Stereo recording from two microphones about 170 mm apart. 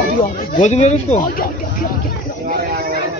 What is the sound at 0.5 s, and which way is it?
Speech, 40° left (ahead or behind).